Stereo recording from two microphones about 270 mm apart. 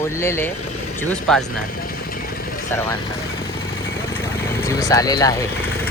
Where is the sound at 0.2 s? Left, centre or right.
Centre.